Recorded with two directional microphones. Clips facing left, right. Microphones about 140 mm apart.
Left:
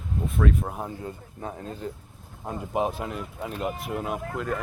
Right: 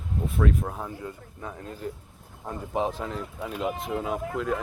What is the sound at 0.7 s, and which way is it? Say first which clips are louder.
Speech: left 1 dB; 20° left (ahead or behind).